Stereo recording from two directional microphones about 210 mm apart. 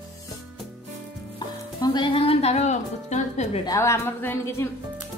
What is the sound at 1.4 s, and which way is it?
Music, 20° left (ahead or behind).